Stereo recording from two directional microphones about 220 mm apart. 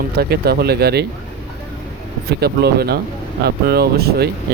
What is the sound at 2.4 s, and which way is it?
Speech, 45° right (ahead or behind).